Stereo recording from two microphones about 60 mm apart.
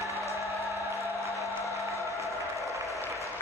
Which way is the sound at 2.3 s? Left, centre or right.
Left.